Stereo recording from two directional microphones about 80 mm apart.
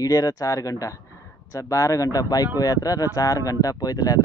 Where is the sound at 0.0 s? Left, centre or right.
Left.